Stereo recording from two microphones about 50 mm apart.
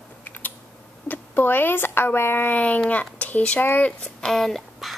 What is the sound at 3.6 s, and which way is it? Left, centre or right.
Speech, left.